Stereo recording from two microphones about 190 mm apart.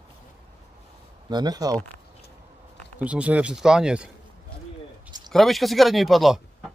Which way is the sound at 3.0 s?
5° right (ahead or behind).